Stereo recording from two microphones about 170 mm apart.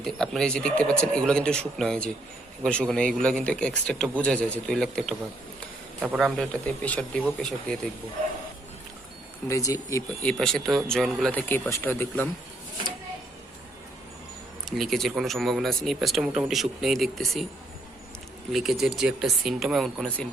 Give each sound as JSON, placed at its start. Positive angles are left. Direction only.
{"t": 0.0, "sound": "speech", "side_deg": 5}
{"t": 9.5, "sound": "speech", "side_deg": 20}
{"t": 10.2, "sound": "speech", "side_deg": 5}
{"t": 14.6, "sound": "speech", "side_deg": 0}
{"t": 18.5, "sound": "speech", "side_deg": 0}